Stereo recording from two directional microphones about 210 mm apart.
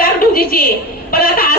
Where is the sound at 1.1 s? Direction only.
45° left (ahead or behind).